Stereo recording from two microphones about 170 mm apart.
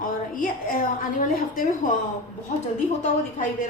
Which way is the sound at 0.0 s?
55° left (ahead or behind).